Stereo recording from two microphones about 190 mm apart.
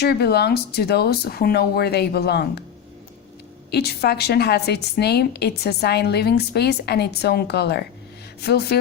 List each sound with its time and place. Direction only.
0.0 s a woman's voice: 60° left (ahead or behind)
3.7 s a woman's voice: 60° left (ahead or behind)